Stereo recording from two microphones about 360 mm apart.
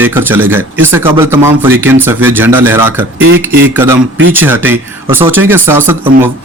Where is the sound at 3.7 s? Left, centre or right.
Centre.